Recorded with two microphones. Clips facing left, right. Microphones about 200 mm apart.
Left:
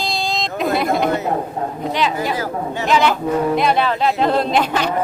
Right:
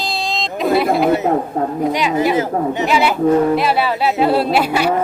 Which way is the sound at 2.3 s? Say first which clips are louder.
Right 5 dB; 20° right (ahead or behind).